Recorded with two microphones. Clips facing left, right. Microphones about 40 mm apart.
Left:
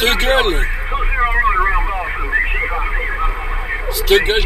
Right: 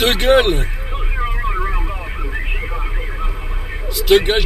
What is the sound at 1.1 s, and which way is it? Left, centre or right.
Vehicle, left.